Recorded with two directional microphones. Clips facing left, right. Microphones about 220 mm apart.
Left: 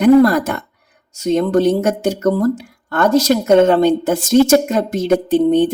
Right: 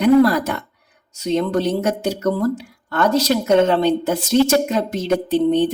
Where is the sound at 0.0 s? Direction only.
50° left (ahead or behind).